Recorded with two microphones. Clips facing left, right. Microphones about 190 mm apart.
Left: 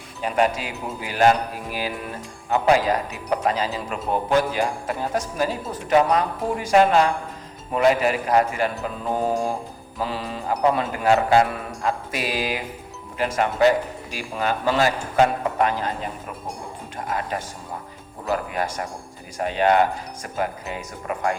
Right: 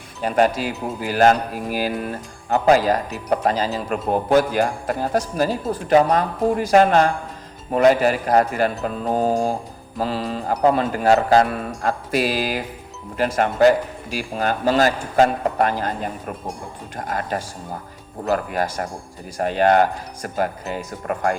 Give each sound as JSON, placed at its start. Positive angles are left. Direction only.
{"t": 0.2, "sound": "a woman's voice", "side_deg": -40}
{"t": 3.8, "sound": "a woman's voice", "side_deg": -45}